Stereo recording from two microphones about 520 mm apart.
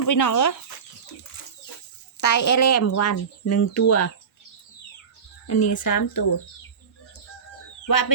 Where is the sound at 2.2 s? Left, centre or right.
Left.